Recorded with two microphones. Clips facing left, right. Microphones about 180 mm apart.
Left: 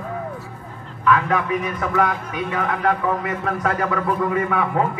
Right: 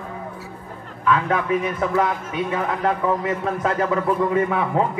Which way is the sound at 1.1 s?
25° right (ahead or behind).